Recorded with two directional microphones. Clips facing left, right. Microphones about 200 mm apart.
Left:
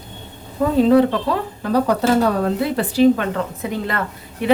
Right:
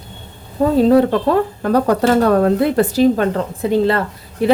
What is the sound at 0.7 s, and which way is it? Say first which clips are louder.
Speech: right 2 dB; 40° right (ahead or behind).